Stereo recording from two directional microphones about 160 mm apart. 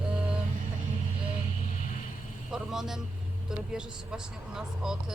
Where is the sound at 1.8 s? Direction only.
50° left (ahead or behind).